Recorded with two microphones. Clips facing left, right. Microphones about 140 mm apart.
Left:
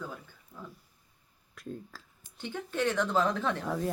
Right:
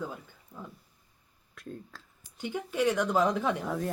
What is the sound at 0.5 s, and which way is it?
Speech, 40° right (ahead or behind).